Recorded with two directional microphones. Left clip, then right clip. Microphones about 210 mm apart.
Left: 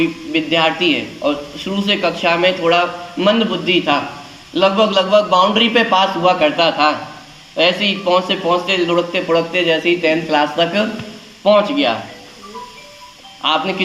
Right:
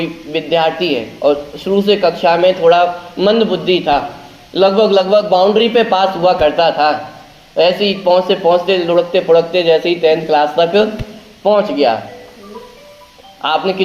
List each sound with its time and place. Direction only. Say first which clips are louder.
0.0 s a man's voice: left 2 dB; 25° right (ahead or behind)
10.2 s speech: right 3 dB; 5° left (ahead or behind)
11.4 s a man's voice: right 1 dB; 25° right (ahead or behind)
13.4 s a man's voice: right 2 dB; 20° right (ahead or behind)